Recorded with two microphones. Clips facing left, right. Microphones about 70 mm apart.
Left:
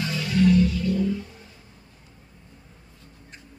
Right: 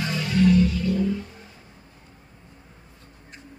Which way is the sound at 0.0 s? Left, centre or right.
Right.